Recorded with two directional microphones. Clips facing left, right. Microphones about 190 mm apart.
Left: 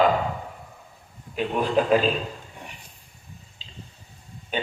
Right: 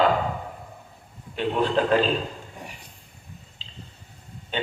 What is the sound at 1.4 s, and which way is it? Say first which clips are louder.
Speech: even; 10° left (ahead or behind).